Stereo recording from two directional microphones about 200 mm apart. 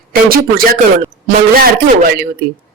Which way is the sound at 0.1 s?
45° right (ahead or behind).